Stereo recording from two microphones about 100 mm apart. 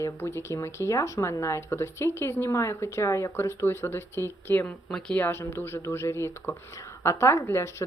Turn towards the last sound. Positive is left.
turn(degrees=25)  # may be behind; listen again after turning